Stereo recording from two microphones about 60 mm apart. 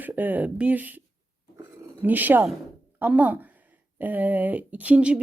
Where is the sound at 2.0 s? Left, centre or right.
Right.